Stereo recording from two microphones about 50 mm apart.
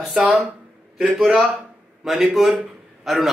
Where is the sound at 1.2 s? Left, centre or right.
Centre.